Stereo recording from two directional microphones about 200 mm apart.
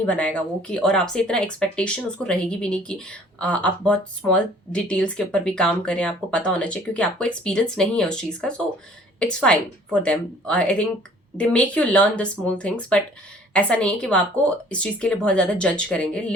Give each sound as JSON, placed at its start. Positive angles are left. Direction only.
{"t": 0.0, "sound": "speech", "side_deg": 5}